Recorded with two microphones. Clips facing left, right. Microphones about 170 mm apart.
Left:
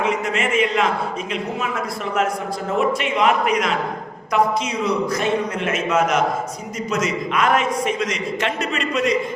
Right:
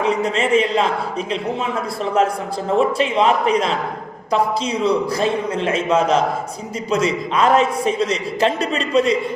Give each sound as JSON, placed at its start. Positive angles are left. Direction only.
{"t": 0.0, "sound": "a man's voice", "side_deg": -30}
{"t": 2.7, "sound": "a man's voice", "side_deg": -30}